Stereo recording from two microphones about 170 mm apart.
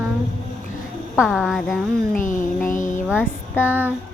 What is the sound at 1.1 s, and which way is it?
Speech, 5° right (ahead or behind).